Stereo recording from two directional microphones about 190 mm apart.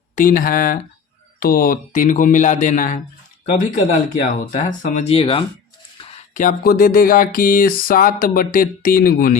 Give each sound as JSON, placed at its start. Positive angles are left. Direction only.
{"t": 0.2, "sound": "speech", "side_deg": 45}
{"t": 6.0, "sound": "a sound", "side_deg": 30}
{"t": 6.4, "sound": "speech", "side_deg": 50}